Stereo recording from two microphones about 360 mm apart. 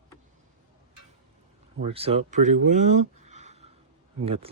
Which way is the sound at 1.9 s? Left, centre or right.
Centre.